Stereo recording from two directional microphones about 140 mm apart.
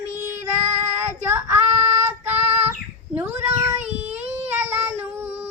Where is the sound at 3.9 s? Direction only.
15° right (ahead or behind).